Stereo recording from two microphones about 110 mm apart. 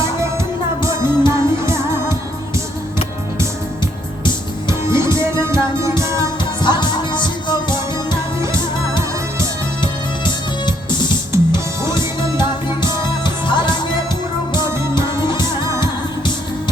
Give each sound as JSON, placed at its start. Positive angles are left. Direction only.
{"t": 0.8, "sound": "music", "side_deg": -25}
{"t": 4.9, "sound": "music", "side_deg": -25}
{"t": 6.6, "sound": "music", "side_deg": 45}
{"t": 10.2, "sound": "music", "side_deg": 45}
{"t": 11.3, "sound": "music", "side_deg": -25}
{"t": 13.2, "sound": "music", "side_deg": 45}
{"t": 15.6, "sound": "music", "side_deg": -25}